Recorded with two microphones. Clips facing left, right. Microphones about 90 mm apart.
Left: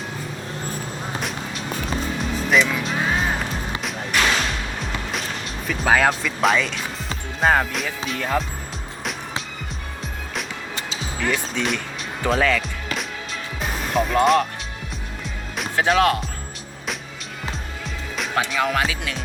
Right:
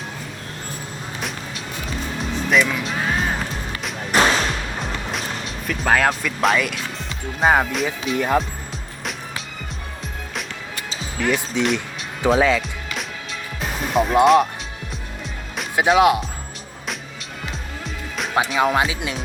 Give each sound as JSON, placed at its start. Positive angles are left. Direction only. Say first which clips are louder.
{"t": 1.2, "sound": "music", "louder": "left 1 dB", "side_deg": 0}
{"t": 4.1, "sound": "music", "louder": "right 4 dB", "side_deg": -40}
{"t": 4.8, "sound": "music", "louder": "right 1 dB", "side_deg": 0}
{"t": 8.1, "sound": "speech", "louder": "right 5 dB", "side_deg": -10}
{"t": 11.2, "sound": "speech", "louder": "right 3 dB", "side_deg": -15}
{"t": 11.6, "sound": "music", "louder": "right 3 dB", "side_deg": 0}
{"t": 12.2, "sound": "speech", "louder": "right 3 dB", "side_deg": -10}
{"t": 13.6, "sound": "music", "louder": "right 2 dB", "side_deg": 0}
{"t": 15.7, "sound": "speech", "louder": "right 3 dB", "side_deg": -15}
{"t": 18.5, "sound": "speech", "louder": "right 4 dB", "side_deg": -20}